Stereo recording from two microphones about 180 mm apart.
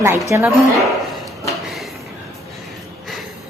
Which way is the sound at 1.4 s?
Centre (ahead or behind).